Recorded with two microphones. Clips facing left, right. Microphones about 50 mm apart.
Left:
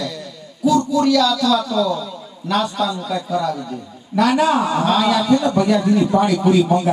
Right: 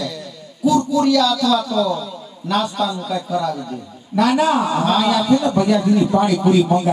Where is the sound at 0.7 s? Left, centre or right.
Left.